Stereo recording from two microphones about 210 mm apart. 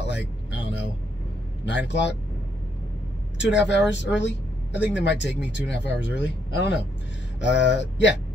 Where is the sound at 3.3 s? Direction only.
55° left (ahead or behind).